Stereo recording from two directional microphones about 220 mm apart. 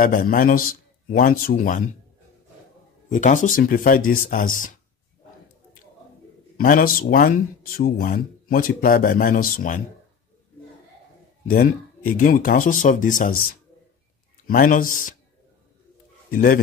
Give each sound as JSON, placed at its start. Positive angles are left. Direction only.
{"t": 0.0, "sound": "speech", "side_deg": 40}
{"t": 3.1, "sound": "speech", "side_deg": 35}
{"t": 6.5, "sound": "speech", "side_deg": 40}
{"t": 11.4, "sound": "speech", "side_deg": 40}
{"t": 16.3, "sound": "speech", "side_deg": 40}